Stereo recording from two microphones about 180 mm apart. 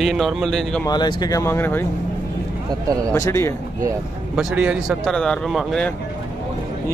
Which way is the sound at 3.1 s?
15° left (ahead or behind).